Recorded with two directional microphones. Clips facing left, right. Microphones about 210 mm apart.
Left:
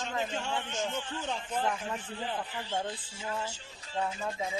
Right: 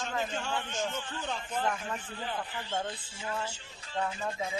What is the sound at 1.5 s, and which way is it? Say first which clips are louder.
Speech: even; 10° left (ahead or behind).